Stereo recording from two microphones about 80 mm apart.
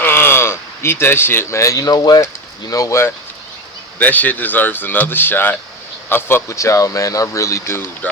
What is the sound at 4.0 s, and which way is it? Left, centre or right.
Speech, left.